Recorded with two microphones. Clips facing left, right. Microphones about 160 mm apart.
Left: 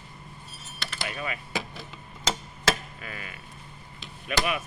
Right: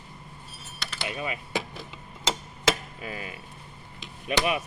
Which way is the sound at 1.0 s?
20° right (ahead or behind).